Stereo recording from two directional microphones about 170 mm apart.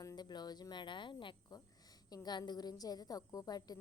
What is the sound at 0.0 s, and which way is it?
Speech, 20° left (ahead or behind).